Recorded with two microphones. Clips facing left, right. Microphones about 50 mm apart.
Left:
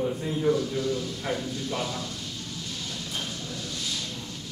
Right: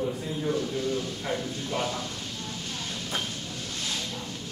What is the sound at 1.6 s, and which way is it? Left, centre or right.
Speech, right.